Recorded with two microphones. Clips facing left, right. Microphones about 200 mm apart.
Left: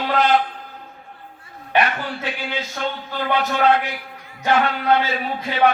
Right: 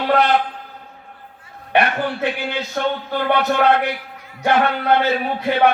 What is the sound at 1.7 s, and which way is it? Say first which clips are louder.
A man's voice: right 3 dB; 60° right (ahead or behind).